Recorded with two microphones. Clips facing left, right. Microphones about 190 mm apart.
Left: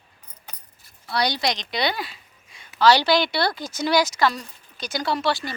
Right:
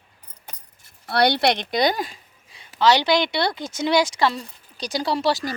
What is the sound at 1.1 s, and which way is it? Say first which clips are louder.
Speech: right 5 dB; 60° right (ahead or behind).